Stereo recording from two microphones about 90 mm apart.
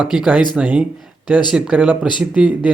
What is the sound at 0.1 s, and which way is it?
Speech, 5° right (ahead or behind).